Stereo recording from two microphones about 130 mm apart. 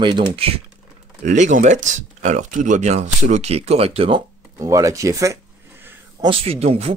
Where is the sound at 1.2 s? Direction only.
70° right (ahead or behind); by 4.2 s 50° right (ahead or behind).